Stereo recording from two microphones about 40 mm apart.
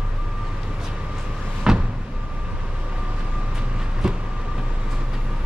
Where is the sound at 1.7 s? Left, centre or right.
Centre.